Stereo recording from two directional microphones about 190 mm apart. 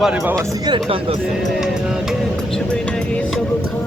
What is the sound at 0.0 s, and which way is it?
Speech, 5° right (ahead or behind).